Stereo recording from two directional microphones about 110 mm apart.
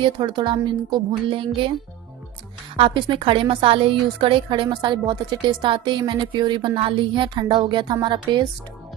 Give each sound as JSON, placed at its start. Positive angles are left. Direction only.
{"t": 0.0, "sound": "a woman's voice", "side_deg": -45}
{"t": 1.3, "sound": "speech", "side_deg": -55}
{"t": 2.8, "sound": "a woman's voice", "side_deg": -50}